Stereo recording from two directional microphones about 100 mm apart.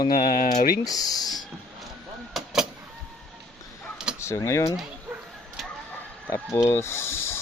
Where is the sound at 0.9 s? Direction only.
40° left (ahead or behind).